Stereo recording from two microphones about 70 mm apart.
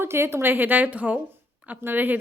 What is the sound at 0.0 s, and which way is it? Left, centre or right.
A woman's voice, right.